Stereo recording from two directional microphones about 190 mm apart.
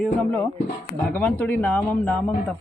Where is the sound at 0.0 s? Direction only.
10° left (ahead or behind).